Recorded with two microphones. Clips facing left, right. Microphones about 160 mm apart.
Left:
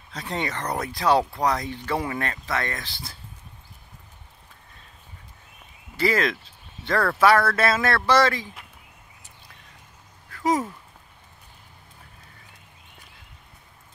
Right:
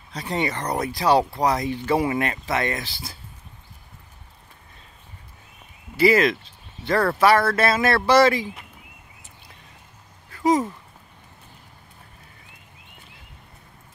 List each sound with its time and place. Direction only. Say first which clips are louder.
0.1 s speech: right 4 dB; 5° right (ahead or behind)
0.6 s speech: right 2 dB; 15° right (ahead or behind)
0.8 s speech: right 2 dB; 5° right (ahead or behind)
5.9 s speech: right 6 dB; 5° right (ahead or behind)
10.4 s speech: right 4 dB; centre (ahead or behind)